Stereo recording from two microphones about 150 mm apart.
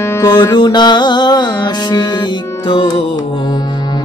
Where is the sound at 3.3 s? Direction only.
30° left (ahead or behind).